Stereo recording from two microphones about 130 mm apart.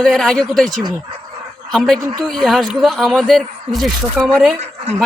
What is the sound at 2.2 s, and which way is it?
Speech, 5° left (ahead or behind).